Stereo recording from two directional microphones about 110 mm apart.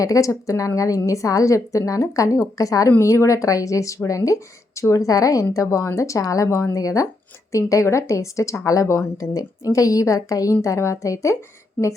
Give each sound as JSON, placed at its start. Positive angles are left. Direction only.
{"t": 0.0, "sound": "speech", "side_deg": 30}